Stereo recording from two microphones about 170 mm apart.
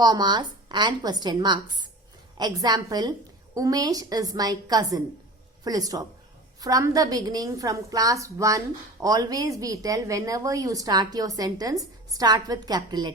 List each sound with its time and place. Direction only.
0.0 s a woman's voice: 25° right (ahead or behind)